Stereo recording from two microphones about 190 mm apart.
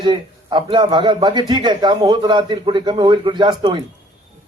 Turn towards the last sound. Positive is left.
turn(degrees=-25)  # may be behind; listen again after turning